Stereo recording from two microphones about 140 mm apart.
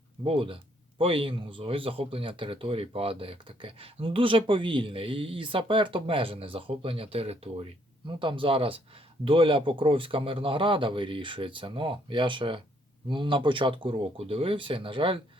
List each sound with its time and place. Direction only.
0.3 s speech: 40° right (ahead or behind)